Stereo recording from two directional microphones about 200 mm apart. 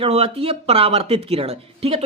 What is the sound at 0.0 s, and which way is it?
Speech, 30° right (ahead or behind).